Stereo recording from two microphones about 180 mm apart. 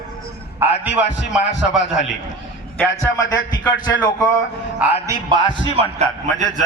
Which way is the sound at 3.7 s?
90° left.